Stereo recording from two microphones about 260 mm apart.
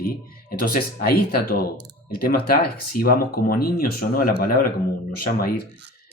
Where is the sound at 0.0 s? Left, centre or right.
Left.